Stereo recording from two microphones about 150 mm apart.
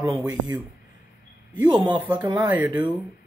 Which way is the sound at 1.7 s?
30° right (ahead or behind).